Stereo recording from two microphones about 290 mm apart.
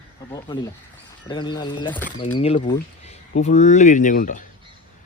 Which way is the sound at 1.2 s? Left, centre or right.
Centre.